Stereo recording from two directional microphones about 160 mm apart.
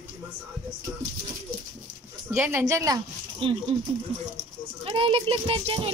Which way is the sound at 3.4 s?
35° right (ahead or behind).